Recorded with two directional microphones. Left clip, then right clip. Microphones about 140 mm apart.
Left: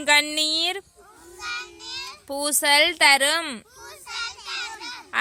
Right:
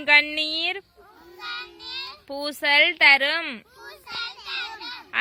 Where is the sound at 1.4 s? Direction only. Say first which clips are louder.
Left 2 dB; centre (ahead or behind).